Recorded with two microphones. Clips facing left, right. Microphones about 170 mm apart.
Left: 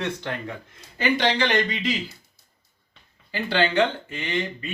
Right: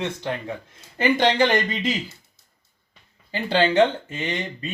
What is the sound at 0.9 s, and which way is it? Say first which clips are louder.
Speech: right 4 dB; 50° right (ahead or behind).